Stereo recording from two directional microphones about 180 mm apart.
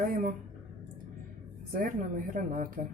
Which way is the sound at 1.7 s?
50° right (ahead or behind).